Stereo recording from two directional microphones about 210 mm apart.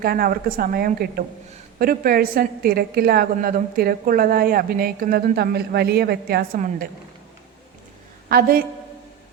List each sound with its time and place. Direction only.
0.0 s a woman's voice: 45° right (ahead or behind)
8.3 s a woman's voice: 45° right (ahead or behind)